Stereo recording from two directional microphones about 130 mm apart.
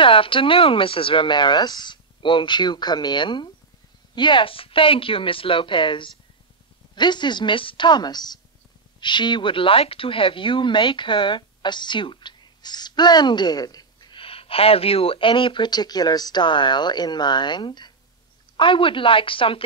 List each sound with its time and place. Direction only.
0.0 s speech: 40° left (ahead or behind)